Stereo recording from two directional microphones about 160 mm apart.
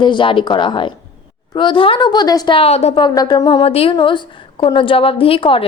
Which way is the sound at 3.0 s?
25° left (ahead or behind).